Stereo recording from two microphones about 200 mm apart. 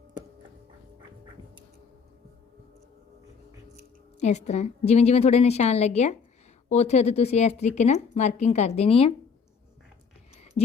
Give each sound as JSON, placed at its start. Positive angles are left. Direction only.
{"t": 3.8, "sound": "speech", "side_deg": 35}